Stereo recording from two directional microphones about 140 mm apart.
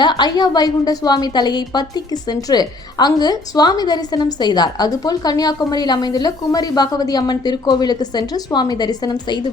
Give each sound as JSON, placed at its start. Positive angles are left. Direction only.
{"t": 0.0, "sound": "a woman's voice", "side_deg": 30}